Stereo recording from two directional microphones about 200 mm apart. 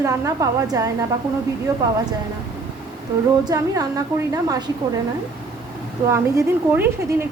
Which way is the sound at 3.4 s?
15° right (ahead or behind).